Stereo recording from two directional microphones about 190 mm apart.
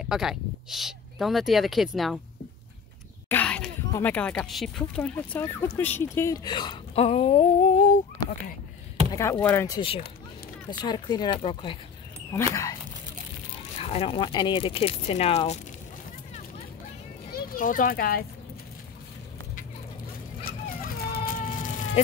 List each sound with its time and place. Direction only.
0.0 s speech: 5° right (ahead or behind)
3.3 s speech: 10° left (ahead or behind); by 8.0 s 40° left (ahead or behind)
9.1 s speech: 15° left (ahead or behind)
9.8 s speech: 30° left (ahead or behind)
12.3 s speech: 15° left (ahead or behind)
13.7 s speech: 30° left (ahead or behind)
17.3 s a child's voice: 50° left (ahead or behind)
20.4 s baby cry: 50° left (ahead or behind)